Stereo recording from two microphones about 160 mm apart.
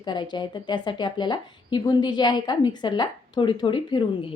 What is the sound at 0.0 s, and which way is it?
A woman's voice, 30° left (ahead or behind).